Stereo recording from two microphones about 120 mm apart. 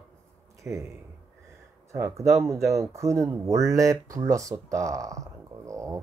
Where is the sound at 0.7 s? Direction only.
15° right (ahead or behind).